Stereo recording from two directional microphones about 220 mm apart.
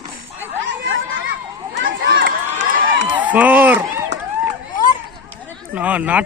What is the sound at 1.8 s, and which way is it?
Run, 55° right (ahead or behind).